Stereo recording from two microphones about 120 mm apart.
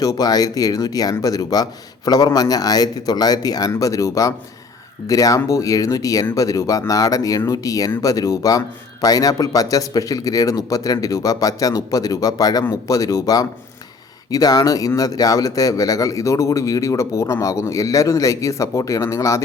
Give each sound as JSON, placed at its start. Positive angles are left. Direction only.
{"t": 0.0, "sound": "speech", "side_deg": 30}